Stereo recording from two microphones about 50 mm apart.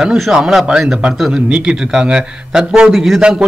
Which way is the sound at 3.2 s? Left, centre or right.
Centre.